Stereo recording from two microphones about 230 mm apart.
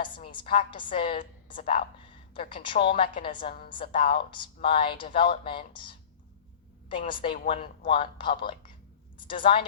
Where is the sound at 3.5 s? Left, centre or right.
Left.